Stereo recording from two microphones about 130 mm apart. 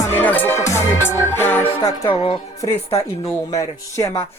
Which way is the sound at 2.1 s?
45° left (ahead or behind).